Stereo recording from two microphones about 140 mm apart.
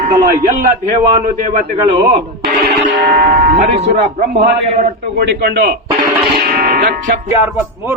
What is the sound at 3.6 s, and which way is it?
Speech, 50° right (ahead or behind).